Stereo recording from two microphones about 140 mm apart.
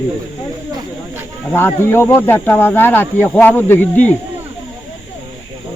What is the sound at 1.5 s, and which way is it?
Speech, 15° left (ahead or behind).